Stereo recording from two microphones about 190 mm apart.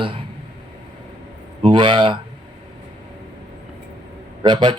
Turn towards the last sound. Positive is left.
turn(degrees=-25)  # may be behind; listen again after turning